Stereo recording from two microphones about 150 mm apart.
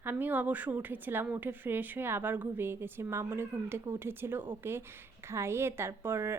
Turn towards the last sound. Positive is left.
turn(degrees=-15)  # may be behind; listen again after turning